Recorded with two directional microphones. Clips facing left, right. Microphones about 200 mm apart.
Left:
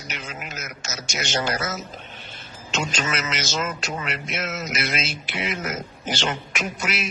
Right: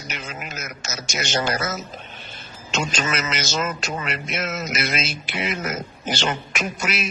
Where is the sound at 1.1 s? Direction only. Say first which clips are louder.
Right 2 dB; 45° right (ahead or behind).